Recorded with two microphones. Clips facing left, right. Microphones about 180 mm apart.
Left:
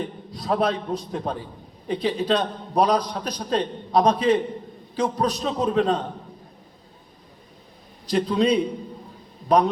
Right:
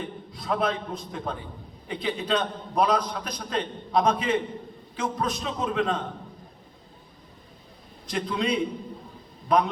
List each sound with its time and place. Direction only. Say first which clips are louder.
0.0 s a man's voice: left 4 dB; 35° left (ahead or behind)
8.0 s a man's voice: left 7 dB; 35° left (ahead or behind)